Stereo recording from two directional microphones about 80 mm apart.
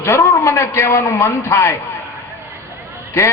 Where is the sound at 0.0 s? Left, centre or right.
Left.